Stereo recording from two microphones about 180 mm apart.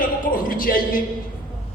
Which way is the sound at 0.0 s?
50° left (ahead or behind).